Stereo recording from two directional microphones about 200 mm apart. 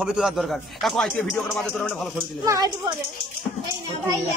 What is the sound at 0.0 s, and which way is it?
Speech, centre (ahead or behind).